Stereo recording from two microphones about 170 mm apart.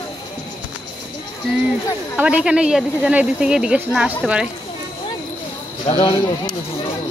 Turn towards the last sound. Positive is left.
turn(degrees=25)  # may be behind; listen again after turning